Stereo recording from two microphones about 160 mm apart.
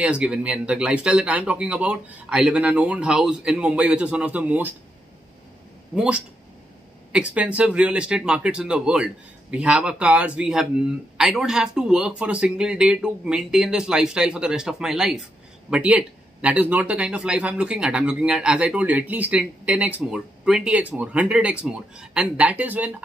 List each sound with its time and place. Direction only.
0.0 s speech: 5° right (ahead or behind)
5.9 s speech: 5° right (ahead or behind)